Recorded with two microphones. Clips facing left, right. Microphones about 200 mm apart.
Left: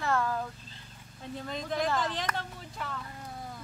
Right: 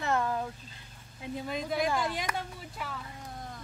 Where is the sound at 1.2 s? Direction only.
10° right (ahead or behind).